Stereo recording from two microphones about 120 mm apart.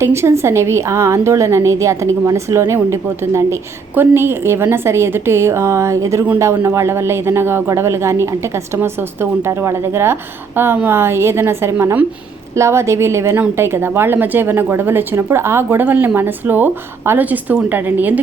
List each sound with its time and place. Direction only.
0.0 s a woman's voice: 20° right (ahead or behind)